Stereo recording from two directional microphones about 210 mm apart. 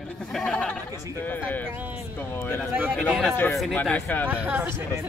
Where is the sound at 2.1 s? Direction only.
10° left (ahead or behind).